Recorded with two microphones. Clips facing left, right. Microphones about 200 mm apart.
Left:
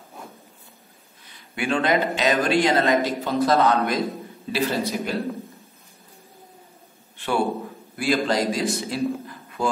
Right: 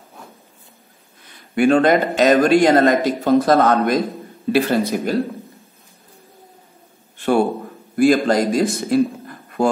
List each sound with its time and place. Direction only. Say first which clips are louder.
1.5 s a woman's voice: right 8 dB; 45° right (ahead or behind)
7.9 s a man's voice: right 8 dB; 50° right (ahead or behind)